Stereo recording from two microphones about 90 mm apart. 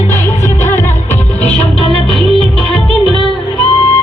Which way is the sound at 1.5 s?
15° left (ahead or behind).